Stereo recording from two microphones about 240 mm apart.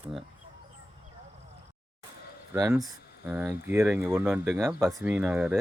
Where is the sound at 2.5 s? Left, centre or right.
Centre.